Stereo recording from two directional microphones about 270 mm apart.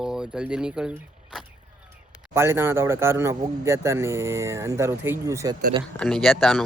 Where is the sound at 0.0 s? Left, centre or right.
Centre.